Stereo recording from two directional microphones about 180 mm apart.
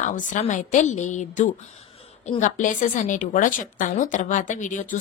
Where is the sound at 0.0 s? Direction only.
45° left (ahead or behind).